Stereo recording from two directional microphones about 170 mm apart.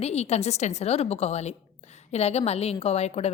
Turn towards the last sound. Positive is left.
turn(degrees=40)  # may be behind; listen again after turning